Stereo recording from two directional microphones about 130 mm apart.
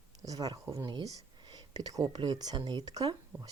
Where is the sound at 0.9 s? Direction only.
35° right (ahead or behind).